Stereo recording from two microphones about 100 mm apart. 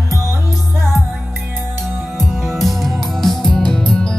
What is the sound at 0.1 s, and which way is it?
Music, 30° left (ahead or behind).